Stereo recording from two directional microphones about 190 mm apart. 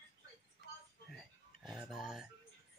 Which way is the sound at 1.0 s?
Centre (ahead or behind).